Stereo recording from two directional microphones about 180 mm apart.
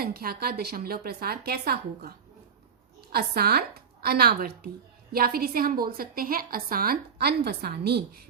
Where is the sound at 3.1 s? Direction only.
60° right (ahead or behind).